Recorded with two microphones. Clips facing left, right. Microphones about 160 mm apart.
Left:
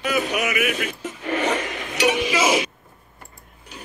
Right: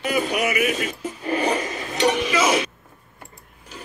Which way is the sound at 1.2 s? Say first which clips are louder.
Right 1 dB; 35° right (ahead or behind).